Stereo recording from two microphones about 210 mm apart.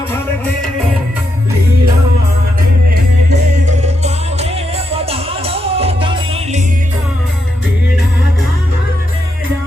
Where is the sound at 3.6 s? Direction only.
35° right (ahead or behind).